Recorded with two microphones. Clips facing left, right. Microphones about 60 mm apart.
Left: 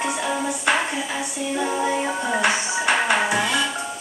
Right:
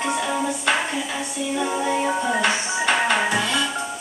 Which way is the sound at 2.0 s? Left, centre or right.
Centre.